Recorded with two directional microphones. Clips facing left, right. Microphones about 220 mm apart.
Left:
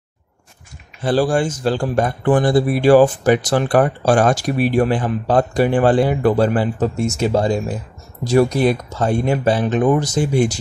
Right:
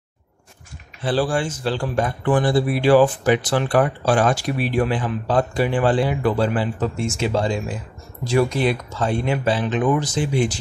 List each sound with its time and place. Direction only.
1.0 s a man's voice: 45° left (ahead or behind)